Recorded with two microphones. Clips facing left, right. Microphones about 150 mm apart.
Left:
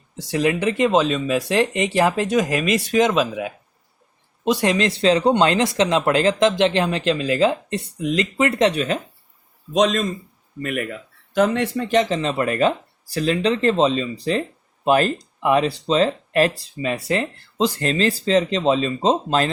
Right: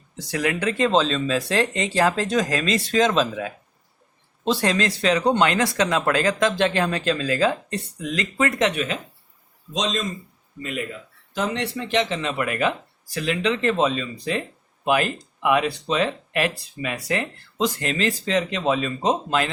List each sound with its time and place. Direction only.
0.2 s speech: 20° left (ahead or behind); by 9.0 s 35° left (ahead or behind)
9.7 s speech: 55° left (ahead or behind); by 19.5 s 30° left (ahead or behind)